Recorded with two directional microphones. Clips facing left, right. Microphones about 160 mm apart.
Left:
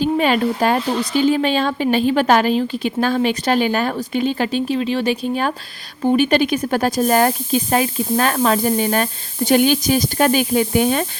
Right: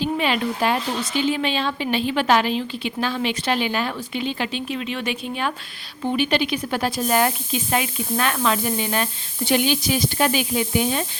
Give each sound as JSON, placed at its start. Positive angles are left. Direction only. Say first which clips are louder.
{"t": 0.0, "sound": "speech", "louder": "left 6 dB", "side_deg": 45}